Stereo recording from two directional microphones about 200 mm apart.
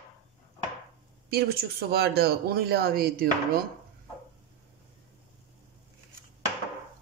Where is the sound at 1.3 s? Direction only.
50° right (ahead or behind).